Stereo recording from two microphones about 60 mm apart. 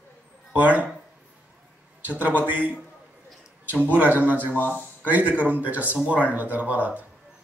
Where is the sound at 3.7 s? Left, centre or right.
Right.